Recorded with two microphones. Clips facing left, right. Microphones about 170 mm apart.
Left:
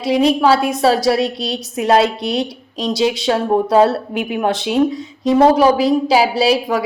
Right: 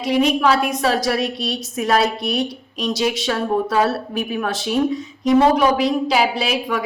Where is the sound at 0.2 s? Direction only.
35° left (ahead or behind).